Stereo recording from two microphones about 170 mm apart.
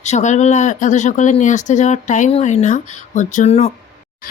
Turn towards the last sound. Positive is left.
turn(degrees=40)  # may be behind; listen again after turning